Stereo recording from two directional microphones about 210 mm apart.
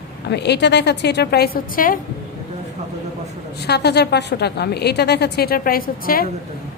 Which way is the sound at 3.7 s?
50° left (ahead or behind).